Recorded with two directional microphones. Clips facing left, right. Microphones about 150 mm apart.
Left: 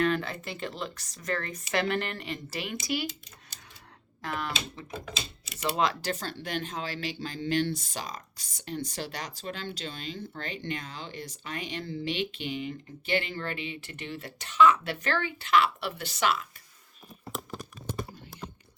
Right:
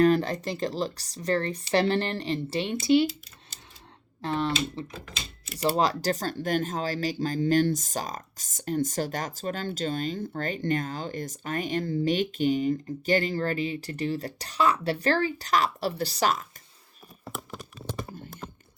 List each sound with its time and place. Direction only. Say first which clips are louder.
0.0 s speech: right 6 dB; 40° right (ahead or behind)
4.2 s speech: right 7 dB; 30° right (ahead or behind)